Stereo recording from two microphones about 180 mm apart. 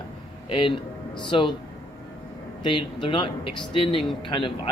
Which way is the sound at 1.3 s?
25° left (ahead or behind).